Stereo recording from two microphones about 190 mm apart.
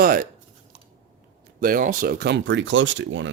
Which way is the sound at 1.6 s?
45° right (ahead or behind).